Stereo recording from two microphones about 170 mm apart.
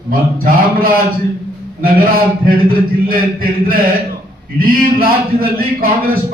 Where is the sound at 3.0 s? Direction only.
60° right (ahead or behind).